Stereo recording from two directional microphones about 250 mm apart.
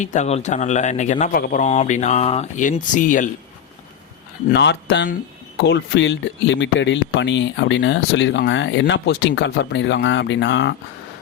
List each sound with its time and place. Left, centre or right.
0.0 s speech: left
4.5 s speech: left